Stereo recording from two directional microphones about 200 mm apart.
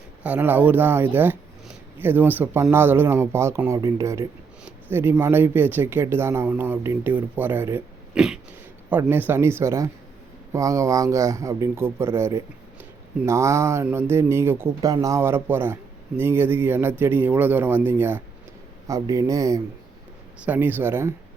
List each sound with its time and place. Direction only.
0.2 s speech: 10° right (ahead or behind)